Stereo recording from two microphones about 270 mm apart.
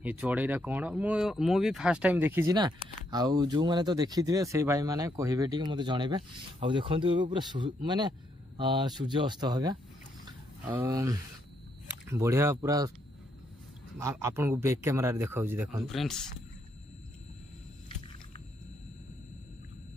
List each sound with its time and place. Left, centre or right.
0.0 s speech: centre
10.2 s a sound: centre
12.1 s speech: centre
13.9 s speech: centre